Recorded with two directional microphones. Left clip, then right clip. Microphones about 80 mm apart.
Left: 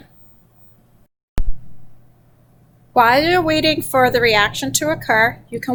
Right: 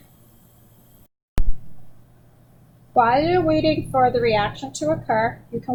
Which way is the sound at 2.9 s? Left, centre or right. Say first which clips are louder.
Left 4 dB; left.